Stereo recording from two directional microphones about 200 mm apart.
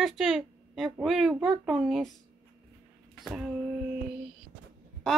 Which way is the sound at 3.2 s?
5° right (ahead or behind).